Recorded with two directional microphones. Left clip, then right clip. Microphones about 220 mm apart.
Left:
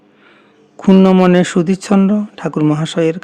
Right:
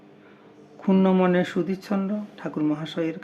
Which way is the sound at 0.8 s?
50° left (ahead or behind).